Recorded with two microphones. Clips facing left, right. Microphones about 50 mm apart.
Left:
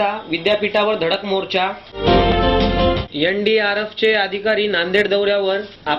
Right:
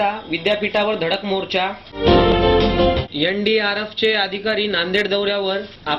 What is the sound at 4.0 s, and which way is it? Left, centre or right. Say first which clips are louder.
Speech: left 2 dB; centre.